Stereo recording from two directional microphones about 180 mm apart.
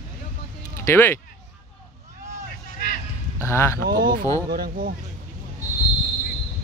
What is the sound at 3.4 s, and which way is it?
Speech, 15° left (ahead or behind).